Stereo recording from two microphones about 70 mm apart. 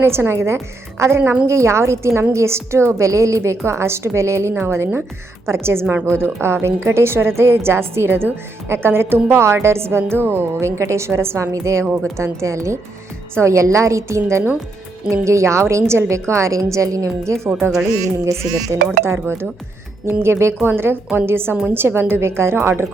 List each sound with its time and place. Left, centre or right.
0.0 s a woman's voice: right
17.6 s a woman's voice: centre
18.9 s a woman's voice: right